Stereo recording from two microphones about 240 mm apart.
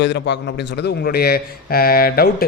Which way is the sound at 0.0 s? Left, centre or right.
Left.